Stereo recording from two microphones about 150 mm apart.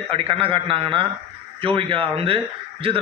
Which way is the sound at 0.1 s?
35° right (ahead or behind).